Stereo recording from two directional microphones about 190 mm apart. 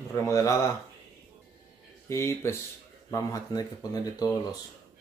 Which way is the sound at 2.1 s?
15° left (ahead or behind).